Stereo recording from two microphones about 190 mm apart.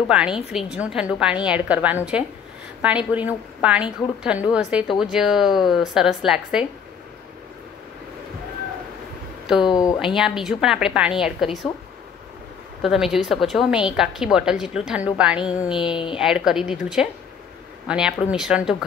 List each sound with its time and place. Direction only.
0.1 s a woman's voice: 5° right (ahead or behind)
9.5 s a woman's voice: 5° right (ahead or behind)
12.8 s a woman's voice: centre (ahead or behind)
15.6 s a sound: 25° left (ahead or behind)
16.2 s a woman's voice: 5° right (ahead or behind)